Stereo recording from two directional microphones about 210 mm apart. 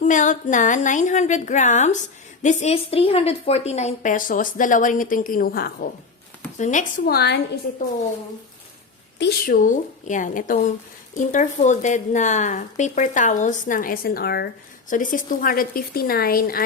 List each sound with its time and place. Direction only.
0.0 s a woman's voice: 35° left (ahead or behind)
9.1 s a woman's voice: 50° left (ahead or behind)